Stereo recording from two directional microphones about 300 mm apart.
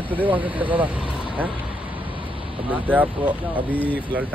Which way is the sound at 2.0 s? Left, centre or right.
Centre.